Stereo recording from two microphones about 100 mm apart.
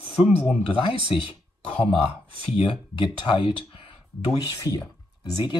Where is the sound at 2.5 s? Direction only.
60° left (ahead or behind).